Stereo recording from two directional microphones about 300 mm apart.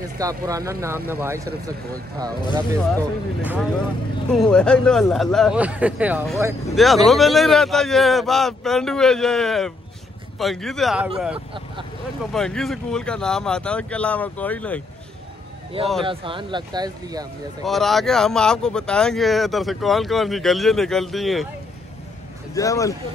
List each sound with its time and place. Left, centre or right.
0.0 s speech: centre
11.3 s speech: centre
12.3 s speech: centre
15.8 s speech: centre
17.6 s speech: centre
22.5 s speech: centre